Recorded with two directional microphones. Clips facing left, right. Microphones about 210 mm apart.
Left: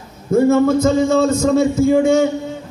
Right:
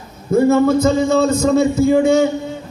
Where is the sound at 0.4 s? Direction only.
45° left (ahead or behind).